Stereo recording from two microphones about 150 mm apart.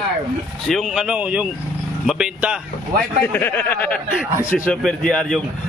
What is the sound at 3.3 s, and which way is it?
A man's voice, 10° left (ahead or behind).